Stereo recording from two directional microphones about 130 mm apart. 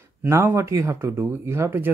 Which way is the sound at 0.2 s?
15° right (ahead or behind).